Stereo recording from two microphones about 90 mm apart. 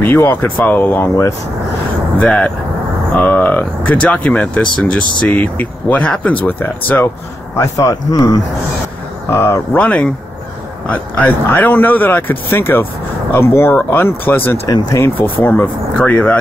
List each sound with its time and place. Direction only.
0.0 s speech: 25° left (ahead or behind)
2.1 s speech: 15° left (ahead or behind)
7.5 s speech: 35° left (ahead or behind)
9.3 s speech: 25° left (ahead or behind)
9.8 s speech: 15° left (ahead or behind)
14.7 s speech: 40° left (ahead or behind)
15.1 s speech: 20° left (ahead or behind)